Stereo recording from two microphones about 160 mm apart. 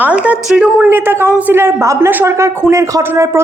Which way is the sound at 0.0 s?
10° right (ahead or behind).